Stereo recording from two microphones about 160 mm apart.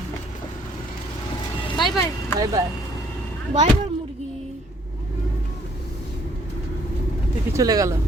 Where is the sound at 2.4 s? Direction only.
25° right (ahead or behind).